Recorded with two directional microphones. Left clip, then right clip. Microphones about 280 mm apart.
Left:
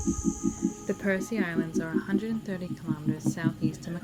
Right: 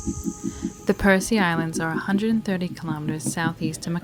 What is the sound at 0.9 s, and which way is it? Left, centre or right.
A woman's voice, right.